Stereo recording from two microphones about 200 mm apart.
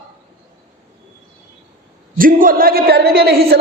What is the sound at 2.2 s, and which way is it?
Speech, 45° right (ahead or behind).